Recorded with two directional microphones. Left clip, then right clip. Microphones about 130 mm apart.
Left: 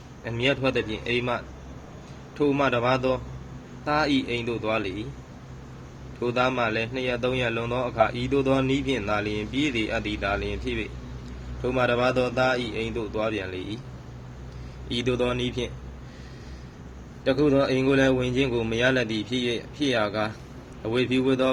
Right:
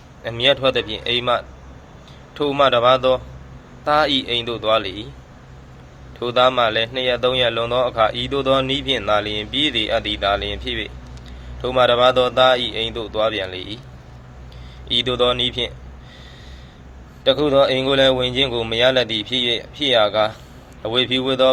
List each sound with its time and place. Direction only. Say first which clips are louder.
0.2 s a man's voice: right 8 dB; 15° left (ahead or behind)
6.1 s a man's voice: right 8 dB; 20° left (ahead or behind)
14.8 s a man's voice: right 8 dB; 20° left (ahead or behind)
17.2 s a man's voice: right 7 dB; 25° left (ahead or behind)